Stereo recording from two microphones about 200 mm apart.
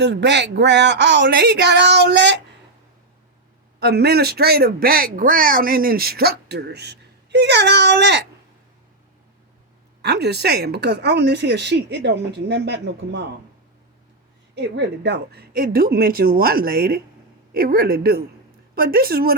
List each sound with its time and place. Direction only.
0.0 s speech: 60° right (ahead or behind)
3.8 s speech: 55° right (ahead or behind)
10.0 s speech: 55° right (ahead or behind)
14.5 s speech: 60° right (ahead or behind)